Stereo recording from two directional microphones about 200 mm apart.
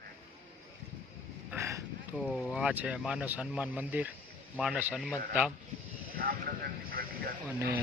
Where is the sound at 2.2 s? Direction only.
Centre (ahead or behind).